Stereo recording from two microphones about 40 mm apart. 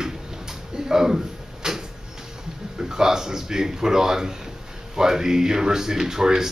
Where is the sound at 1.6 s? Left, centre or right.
Centre.